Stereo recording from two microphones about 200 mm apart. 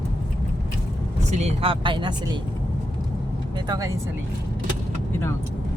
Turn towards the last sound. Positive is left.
turn(degrees=-15)  # may be behind; listen again after turning